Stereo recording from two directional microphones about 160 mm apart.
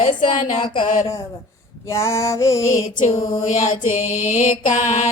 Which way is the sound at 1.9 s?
20° left (ahead or behind).